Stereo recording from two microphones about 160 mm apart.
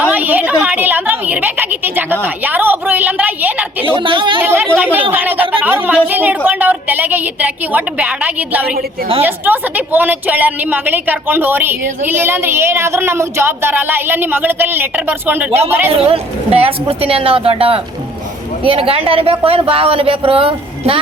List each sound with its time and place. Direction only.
0.0 s a sound: 10° right (ahead or behind)
2.2 s a woman's voice: 10° right (ahead or behind)
3.9 s speech: 30° right (ahead or behind)
4.4 s a woman's voice: 15° right (ahead or behind)
15.9 s speech: 35° right (ahead or behind)